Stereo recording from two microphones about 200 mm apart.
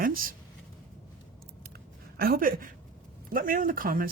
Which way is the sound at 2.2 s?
45° right (ahead or behind).